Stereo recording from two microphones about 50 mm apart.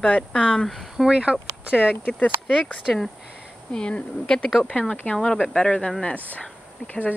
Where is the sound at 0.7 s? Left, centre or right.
Centre.